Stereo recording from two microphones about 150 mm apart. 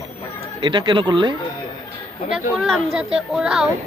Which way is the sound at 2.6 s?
Centre (ahead or behind).